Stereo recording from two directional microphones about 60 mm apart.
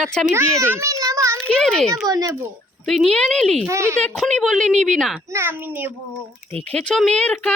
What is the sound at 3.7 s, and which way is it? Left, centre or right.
Speech, right.